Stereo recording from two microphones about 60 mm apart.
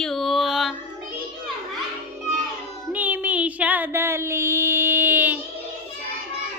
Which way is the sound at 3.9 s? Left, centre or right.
Right.